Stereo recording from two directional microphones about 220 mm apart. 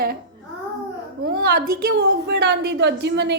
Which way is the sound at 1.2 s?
45° right (ahead or behind).